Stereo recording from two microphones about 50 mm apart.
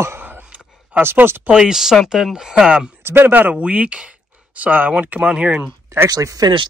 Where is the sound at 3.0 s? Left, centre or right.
Right.